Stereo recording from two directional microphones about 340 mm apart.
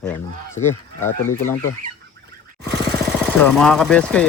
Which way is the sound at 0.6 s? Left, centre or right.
Centre.